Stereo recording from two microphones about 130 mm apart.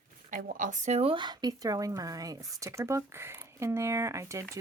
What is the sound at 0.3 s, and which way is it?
Speech, 90° right.